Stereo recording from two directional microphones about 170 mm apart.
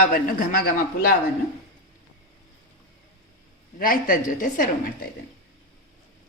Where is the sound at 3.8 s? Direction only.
55° left (ahead or behind).